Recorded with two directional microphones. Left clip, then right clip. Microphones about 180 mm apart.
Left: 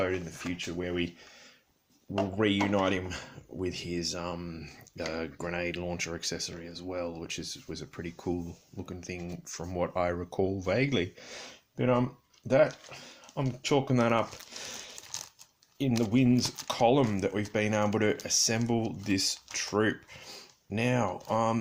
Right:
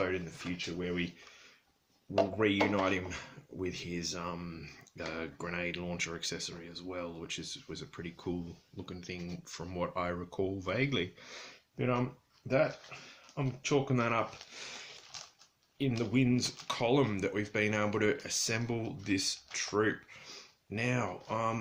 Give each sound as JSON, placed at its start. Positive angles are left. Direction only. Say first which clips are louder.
{"t": 0.0, "sound": "speech", "louder": "left 3 dB", "side_deg": 40}
{"t": 2.6, "sound": "speech", "louder": "left 3 dB", "side_deg": 30}
{"t": 15.1, "sound": "a sound", "louder": "left 7 dB", "side_deg": 60}
{"t": 16.1, "sound": "speech", "louder": "left 4 dB", "side_deg": 35}